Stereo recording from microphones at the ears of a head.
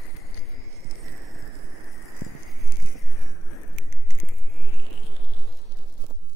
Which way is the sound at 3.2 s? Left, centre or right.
Left.